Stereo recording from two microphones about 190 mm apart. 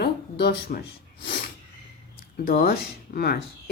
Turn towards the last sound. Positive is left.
turn(degrees=55)  # may be behind; listen again after turning